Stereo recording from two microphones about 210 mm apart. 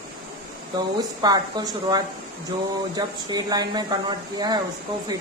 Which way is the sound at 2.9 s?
20° right (ahead or behind).